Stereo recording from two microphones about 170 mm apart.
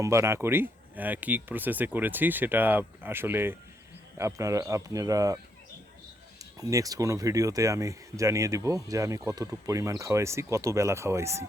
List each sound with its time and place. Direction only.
0.0 s speech: 15° right (ahead or behind)
6.4 s speech: 20° right (ahead or behind)